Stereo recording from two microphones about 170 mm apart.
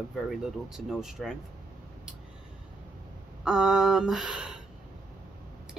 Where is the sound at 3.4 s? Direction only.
5° right (ahead or behind).